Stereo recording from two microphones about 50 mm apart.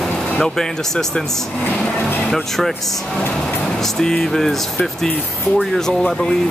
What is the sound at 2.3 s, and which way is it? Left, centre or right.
Speech, centre.